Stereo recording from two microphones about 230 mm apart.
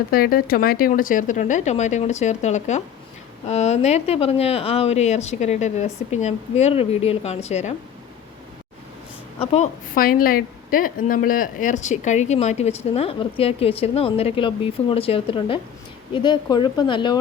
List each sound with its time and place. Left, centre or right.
0.1 s a woman's voice: left
9.4 s a woman's voice: left
9.9 s a woman's voice: left; by 17.2 s centre